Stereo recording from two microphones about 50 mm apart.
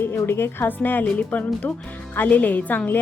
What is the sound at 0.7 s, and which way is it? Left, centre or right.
Speech, left.